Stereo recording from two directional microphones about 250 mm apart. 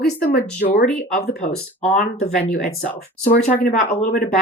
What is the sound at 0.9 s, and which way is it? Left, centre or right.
Speech, left.